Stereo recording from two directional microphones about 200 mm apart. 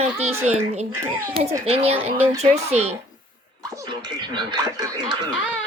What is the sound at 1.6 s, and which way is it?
Speech, 30° right (ahead or behind).